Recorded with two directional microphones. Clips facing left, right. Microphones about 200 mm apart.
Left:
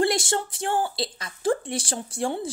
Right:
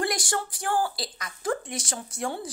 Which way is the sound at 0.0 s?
25° left (ahead or behind).